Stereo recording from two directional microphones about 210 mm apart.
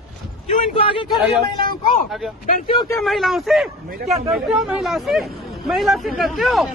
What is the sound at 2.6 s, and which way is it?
Speech, 20° left (ahead or behind).